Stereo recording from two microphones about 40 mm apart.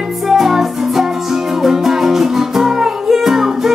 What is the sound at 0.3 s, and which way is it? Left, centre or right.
Music, centre.